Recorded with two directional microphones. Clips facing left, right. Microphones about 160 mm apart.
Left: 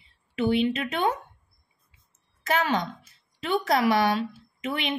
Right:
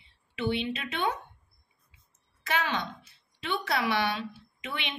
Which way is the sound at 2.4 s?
40° left (ahead or behind).